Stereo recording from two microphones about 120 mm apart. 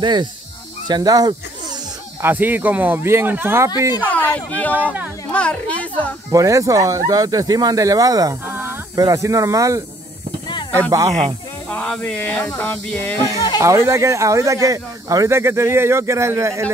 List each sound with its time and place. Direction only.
0.0 s speech: 40° right (ahead or behind)
2.2 s speech: 15° right (ahead or behind)
4.1 s a woman's voice: 10° left (ahead or behind)
6.3 s speech: 25° right (ahead or behind)
11.7 s a sound: 10° left (ahead or behind)
13.6 s speech: 25° right (ahead or behind)